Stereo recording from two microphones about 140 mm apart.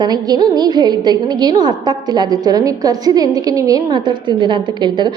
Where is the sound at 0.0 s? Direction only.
30° right (ahead or behind).